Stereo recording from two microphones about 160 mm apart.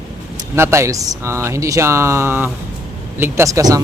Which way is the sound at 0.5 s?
15° right (ahead or behind).